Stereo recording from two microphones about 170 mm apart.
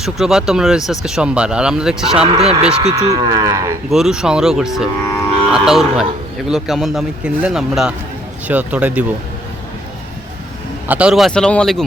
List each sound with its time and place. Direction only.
0.0 s speech: 5° right (ahead or behind)
2.2 s speech: 35° right (ahead or behind)
3.0 s speech: 20° right (ahead or behind)
3.8 s speech: centre (ahead or behind)
10.8 s speech: 5° right (ahead or behind)